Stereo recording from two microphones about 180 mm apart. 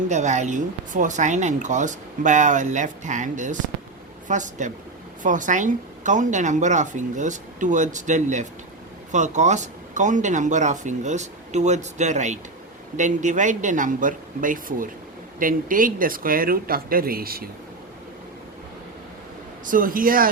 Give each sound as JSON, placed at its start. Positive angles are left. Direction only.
{"t": 0.1, "sound": "speech", "side_deg": -40}
{"t": 19.6, "sound": "speech", "side_deg": -50}